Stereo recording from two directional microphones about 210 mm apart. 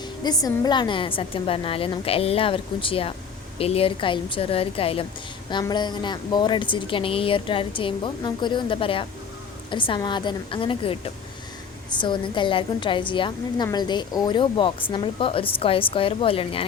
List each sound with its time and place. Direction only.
0.2 s a woman's voice: 20° left (ahead or behind)